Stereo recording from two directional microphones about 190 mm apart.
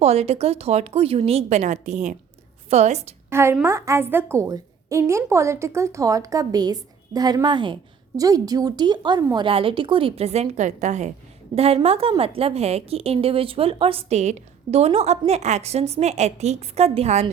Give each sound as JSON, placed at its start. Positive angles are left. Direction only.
{"t": 0.0, "sound": "a woman's voice", "side_deg": -35}
{"t": 3.2, "sound": "a woman's voice", "side_deg": -15}